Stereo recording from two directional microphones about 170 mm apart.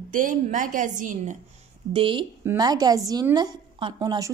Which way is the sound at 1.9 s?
30° right (ahead or behind).